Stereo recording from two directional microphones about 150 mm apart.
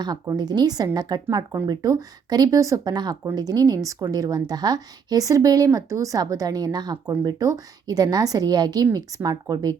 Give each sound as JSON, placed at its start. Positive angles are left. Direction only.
{"t": 0.0, "sound": "speech", "side_deg": -25}